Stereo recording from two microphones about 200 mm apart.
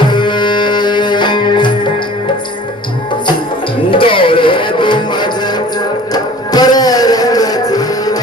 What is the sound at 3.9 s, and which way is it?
Music, 25° left (ahead or behind).